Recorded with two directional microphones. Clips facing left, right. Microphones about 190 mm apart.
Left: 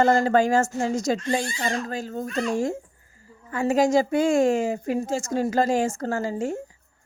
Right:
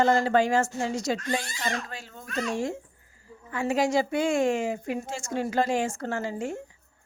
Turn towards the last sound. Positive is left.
turn(degrees=40)  # may be behind; listen again after turning